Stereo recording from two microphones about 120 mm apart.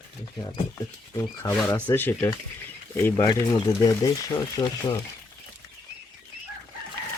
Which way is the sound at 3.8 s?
30° left (ahead or behind).